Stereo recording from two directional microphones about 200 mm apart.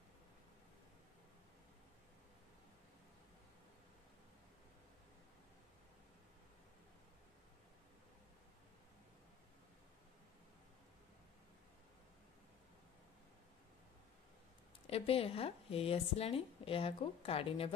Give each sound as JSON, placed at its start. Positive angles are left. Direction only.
{"t": 14.9, "sound": "speech", "side_deg": 30}